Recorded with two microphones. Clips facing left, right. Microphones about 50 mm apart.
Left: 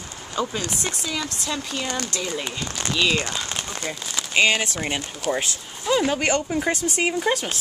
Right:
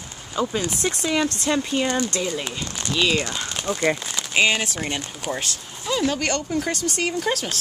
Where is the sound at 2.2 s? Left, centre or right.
Centre.